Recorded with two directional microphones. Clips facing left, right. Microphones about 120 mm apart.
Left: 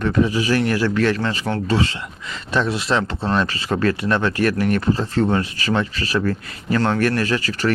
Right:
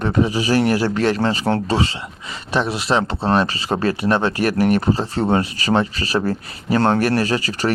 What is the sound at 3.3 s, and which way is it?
Speech, 25° right (ahead or behind).